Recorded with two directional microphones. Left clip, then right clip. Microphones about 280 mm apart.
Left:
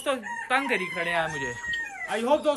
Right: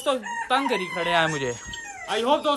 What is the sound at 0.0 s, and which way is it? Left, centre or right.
A man's voice, centre.